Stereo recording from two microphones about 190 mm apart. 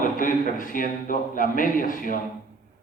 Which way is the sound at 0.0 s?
45° left (ahead or behind).